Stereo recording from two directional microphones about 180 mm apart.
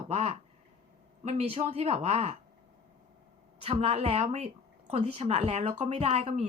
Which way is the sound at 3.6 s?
35° right (ahead or behind).